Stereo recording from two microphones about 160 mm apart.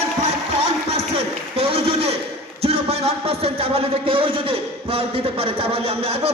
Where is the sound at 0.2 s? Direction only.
40° right (ahead or behind).